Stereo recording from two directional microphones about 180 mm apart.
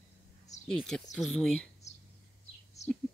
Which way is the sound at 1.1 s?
Centre (ahead or behind).